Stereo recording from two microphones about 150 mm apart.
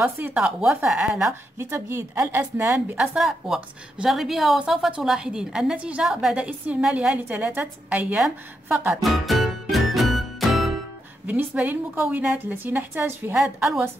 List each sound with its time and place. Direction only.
0.0 s a woman's voice: 10° right (ahead or behind)
3.2 s a woman's voice: 5° right (ahead or behind)
8.9 s music: centre (ahead or behind)
11.2 s a woman's voice: 10° right (ahead or behind)
13.4 s a woman's voice: centre (ahead or behind)